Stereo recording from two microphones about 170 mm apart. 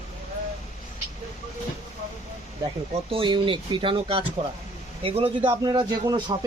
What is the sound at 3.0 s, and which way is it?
Speech, 30° right (ahead or behind).